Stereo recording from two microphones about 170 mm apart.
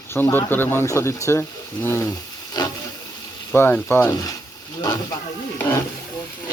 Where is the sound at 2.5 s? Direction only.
25° left (ahead or behind).